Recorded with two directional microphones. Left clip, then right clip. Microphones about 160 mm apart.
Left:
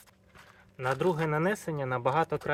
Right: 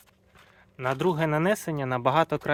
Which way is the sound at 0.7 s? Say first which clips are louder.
Right 3 dB; 90° right.